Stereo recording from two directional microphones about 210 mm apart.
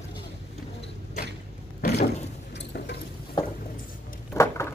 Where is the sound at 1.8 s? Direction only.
50° left (ahead or behind).